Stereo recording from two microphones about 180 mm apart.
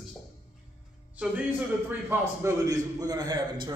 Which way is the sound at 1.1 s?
5° right (ahead or behind).